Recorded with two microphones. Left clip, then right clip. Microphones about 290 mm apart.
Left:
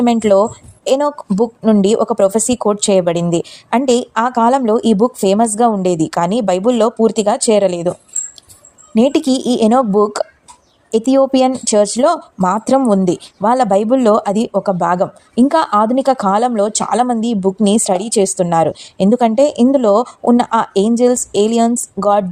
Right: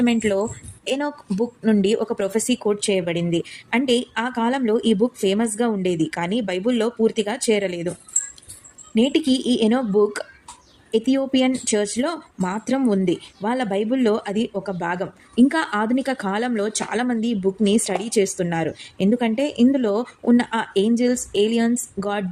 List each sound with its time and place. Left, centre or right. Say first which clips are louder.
0.0 s speech: left 9 dB; left
9.0 s speech: left 6 dB; left